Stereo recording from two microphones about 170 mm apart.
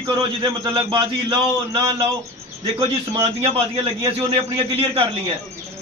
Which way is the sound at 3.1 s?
25° right (ahead or behind).